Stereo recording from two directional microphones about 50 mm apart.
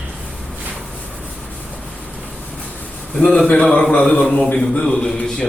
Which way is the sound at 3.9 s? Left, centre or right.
Left.